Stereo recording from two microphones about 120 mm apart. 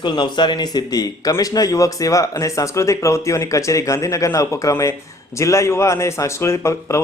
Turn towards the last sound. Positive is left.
turn(degrees=25)  # may be behind; listen again after turning